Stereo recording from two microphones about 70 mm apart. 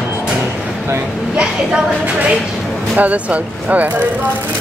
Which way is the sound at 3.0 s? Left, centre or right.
Centre.